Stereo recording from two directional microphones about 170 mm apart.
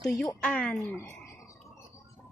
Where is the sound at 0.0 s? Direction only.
5° left (ahead or behind).